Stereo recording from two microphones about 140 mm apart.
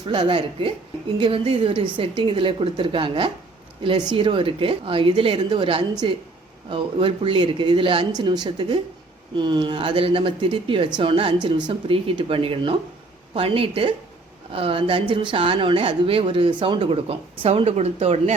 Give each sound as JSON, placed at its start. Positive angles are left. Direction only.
{"t": 0.1, "sound": "speech", "side_deg": -40}